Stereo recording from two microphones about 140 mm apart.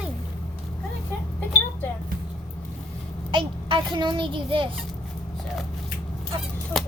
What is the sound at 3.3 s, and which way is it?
A child's voice, 35° right (ahead or behind).